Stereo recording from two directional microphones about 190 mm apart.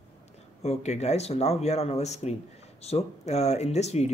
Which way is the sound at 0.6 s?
35° left (ahead or behind).